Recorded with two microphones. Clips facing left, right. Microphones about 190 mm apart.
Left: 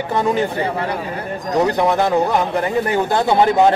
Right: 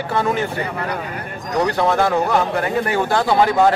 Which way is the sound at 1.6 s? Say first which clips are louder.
Even; 15° left (ahead or behind).